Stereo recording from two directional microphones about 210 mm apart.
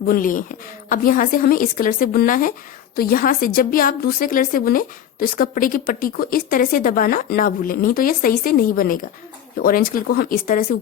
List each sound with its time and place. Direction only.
0.0 s a woman's voice: 40° left (ahead or behind)